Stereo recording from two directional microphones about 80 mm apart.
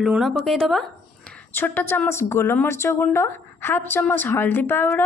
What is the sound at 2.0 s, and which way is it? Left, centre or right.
A woman's voice, left.